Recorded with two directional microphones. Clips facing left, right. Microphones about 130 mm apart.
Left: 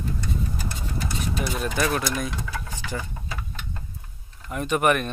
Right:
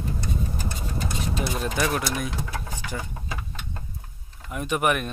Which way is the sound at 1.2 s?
25° right (ahead or behind).